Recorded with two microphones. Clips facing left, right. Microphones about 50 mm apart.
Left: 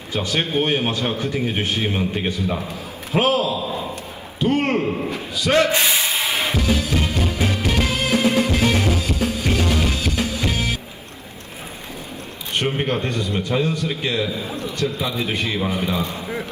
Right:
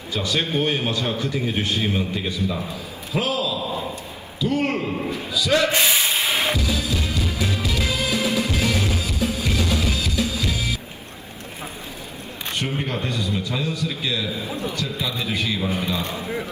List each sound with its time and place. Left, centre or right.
0.1 s a man's voice: left
4.9 s a man's voice: centre
5.1 s speech: left
6.6 s music: left
12.5 s a man's voice: left